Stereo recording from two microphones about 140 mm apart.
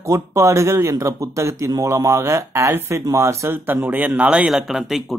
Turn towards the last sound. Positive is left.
turn(degrees=0)  # may be behind; listen again after turning